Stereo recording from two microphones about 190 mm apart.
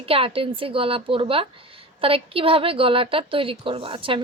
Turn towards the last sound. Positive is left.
turn(degrees=-30)  # may be behind; listen again after turning